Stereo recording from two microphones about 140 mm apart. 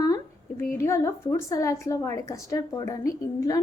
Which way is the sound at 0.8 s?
20° left (ahead or behind).